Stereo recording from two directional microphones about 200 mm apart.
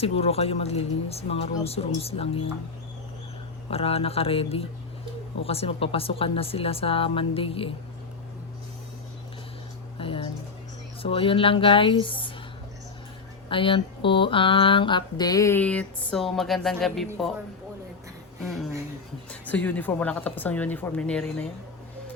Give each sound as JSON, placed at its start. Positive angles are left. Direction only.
{"t": 0.0, "sound": "speech", "side_deg": 30}
{"t": 3.7, "sound": "mantra", "side_deg": 30}
{"t": 10.0, "sound": "music", "side_deg": 25}
{"t": 11.0, "sound": "mantra", "side_deg": 25}
{"t": 13.5, "sound": "mantra", "side_deg": 25}
{"t": 18.4, "sound": "a woman's voice", "side_deg": 0}